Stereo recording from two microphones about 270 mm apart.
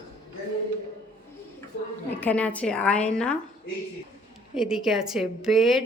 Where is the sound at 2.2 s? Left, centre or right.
Centre.